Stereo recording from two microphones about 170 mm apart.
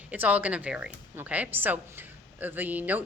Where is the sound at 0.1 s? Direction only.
10° right (ahead or behind).